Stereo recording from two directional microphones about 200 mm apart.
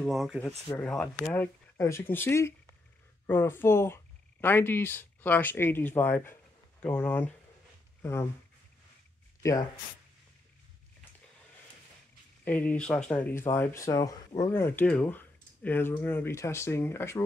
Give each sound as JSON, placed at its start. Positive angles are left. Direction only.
{"t": 0.0, "sound": "speech", "side_deg": 0}
{"t": 9.4, "sound": "speech", "side_deg": 15}
{"t": 12.4, "sound": "speech", "side_deg": 10}